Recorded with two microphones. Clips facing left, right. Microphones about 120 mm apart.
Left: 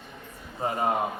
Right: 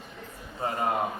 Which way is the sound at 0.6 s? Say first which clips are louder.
Left 2 dB; 20° left (ahead or behind).